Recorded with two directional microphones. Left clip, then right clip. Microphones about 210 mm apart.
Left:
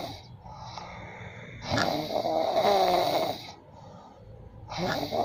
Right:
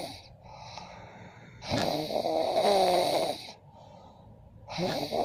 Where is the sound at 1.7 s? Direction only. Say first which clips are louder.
Left 2 dB; 30° right (ahead or behind).